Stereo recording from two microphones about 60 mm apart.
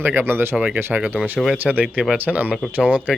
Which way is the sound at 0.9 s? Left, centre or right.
Right.